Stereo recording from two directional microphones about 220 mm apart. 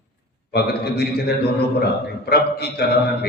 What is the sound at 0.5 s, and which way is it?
A man's voice, 45° left (ahead or behind).